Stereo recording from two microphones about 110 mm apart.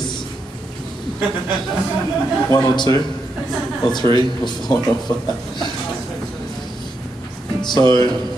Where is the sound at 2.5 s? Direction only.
35° left (ahead or behind).